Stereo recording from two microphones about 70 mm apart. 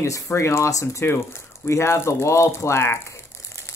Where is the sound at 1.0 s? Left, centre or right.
Left.